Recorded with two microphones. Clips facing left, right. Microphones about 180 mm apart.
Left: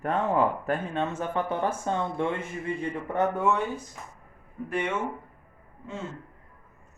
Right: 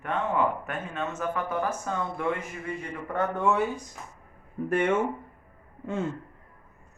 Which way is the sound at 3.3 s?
Centre (ahead or behind).